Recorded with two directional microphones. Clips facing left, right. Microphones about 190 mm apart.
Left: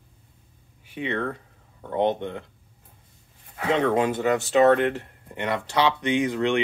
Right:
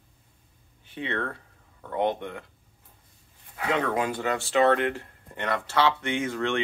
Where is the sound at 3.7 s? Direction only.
25° left (ahead or behind).